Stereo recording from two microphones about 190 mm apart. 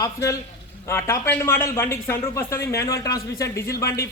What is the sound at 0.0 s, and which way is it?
Speech, 15° left (ahead or behind).